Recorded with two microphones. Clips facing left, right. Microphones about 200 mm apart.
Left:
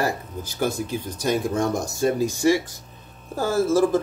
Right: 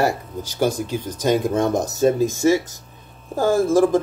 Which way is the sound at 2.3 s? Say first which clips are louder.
Right 2 dB; 45° right (ahead or behind).